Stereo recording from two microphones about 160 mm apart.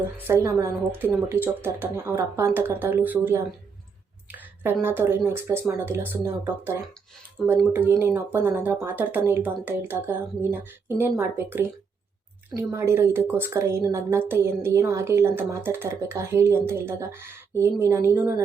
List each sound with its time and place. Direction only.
0.3 s a woman's voice: 20° right (ahead or behind)
12.7 s a woman's voice: 15° right (ahead or behind)